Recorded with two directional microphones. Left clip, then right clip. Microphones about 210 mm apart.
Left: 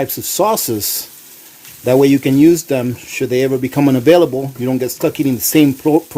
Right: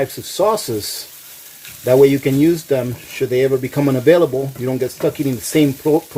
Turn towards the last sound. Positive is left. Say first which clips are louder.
# left 3 dB
turn(degrees=50)  # may be behind; listen again after turning